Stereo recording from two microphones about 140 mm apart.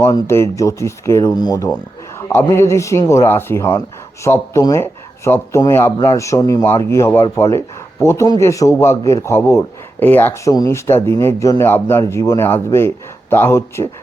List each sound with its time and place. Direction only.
0.3 s speech: 20° left (ahead or behind)